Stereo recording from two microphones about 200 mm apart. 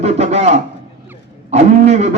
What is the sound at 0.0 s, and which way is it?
A man's voice, 30° right (ahead or behind).